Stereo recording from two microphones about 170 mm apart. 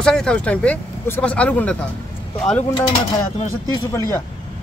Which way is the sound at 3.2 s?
15° left (ahead or behind).